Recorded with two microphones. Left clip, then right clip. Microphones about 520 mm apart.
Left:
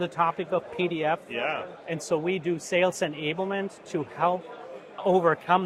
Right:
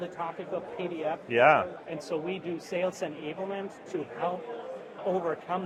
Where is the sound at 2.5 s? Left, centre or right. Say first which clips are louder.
Left 6 dB; left.